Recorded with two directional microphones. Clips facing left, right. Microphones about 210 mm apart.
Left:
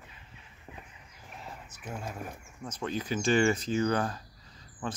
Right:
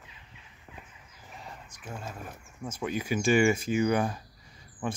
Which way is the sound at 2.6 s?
10° right (ahead or behind).